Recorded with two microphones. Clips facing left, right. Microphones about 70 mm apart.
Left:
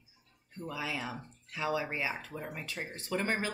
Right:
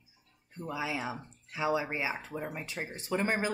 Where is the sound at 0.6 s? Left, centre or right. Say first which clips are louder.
Right 2 dB; centre.